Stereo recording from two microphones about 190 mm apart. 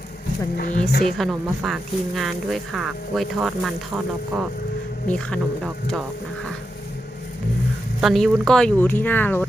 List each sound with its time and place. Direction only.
0.5 s speech: 50° left (ahead or behind)
1.2 s speech: centre (ahead or behind)
8.0 s speech: centre (ahead or behind)